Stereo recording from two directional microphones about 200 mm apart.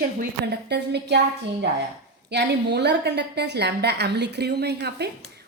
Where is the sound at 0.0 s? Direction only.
50° right (ahead or behind).